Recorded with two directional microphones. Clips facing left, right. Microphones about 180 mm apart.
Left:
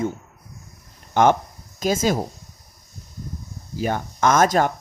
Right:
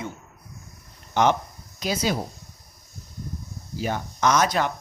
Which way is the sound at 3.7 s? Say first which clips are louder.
Left 4 dB; 50° left (ahead or behind).